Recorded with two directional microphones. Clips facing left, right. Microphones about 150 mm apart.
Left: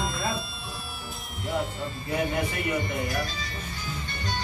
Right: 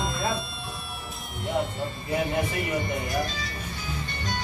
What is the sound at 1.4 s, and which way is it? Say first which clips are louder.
Music: right 2 dB; centre (ahead or behind).